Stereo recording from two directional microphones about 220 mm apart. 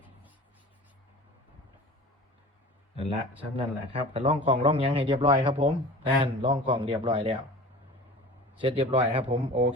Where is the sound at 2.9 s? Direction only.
25° right (ahead or behind).